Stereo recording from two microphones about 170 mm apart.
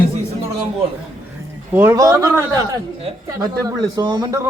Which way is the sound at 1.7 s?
15° right (ahead or behind).